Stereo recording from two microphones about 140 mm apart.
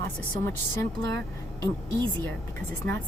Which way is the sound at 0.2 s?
20° left (ahead or behind).